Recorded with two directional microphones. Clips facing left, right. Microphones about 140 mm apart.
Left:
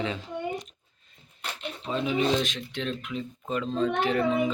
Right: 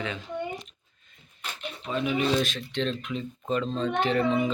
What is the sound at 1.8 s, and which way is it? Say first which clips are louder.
Speech: even; 30° left (ahead or behind).